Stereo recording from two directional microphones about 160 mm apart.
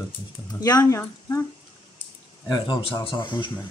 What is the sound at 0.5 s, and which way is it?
Speech, 25° left (ahead or behind).